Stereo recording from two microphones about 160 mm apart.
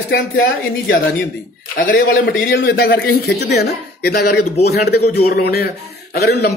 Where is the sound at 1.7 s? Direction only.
65° left (ahead or behind).